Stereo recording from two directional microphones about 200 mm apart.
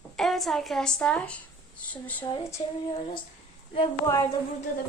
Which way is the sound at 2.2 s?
25° left (ahead or behind).